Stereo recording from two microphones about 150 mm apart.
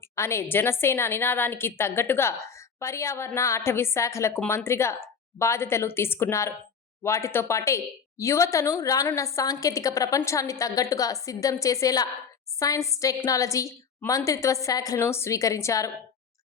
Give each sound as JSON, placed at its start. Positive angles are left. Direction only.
{"t": 0.2, "sound": "a woman's voice", "side_deg": 15}